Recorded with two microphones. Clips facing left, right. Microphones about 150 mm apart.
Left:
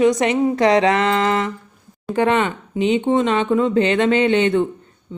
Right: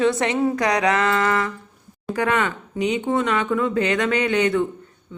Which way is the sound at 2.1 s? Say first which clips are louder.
Left 4 dB; 25° left (ahead or behind).